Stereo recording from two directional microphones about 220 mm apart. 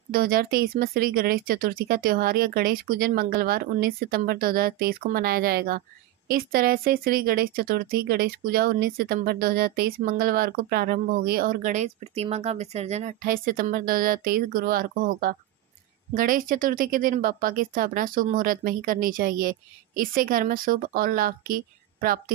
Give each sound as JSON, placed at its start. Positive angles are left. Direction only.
{"t": 0.1, "sound": "speech", "side_deg": -40}